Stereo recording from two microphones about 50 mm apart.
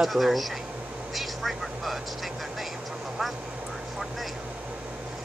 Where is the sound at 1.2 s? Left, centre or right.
Centre.